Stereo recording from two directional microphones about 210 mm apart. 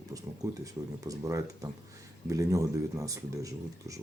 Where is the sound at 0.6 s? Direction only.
15° right (ahead or behind).